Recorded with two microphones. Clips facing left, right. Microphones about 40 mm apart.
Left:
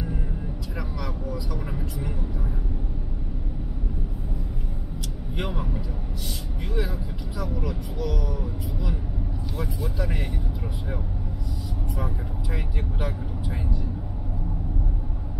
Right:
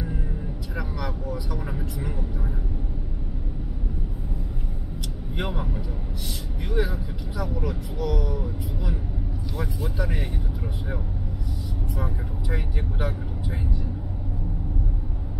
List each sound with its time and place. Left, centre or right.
1.5 s speech: centre
5.4 s speech: centre
6.7 s speech: right
12.4 s speech: centre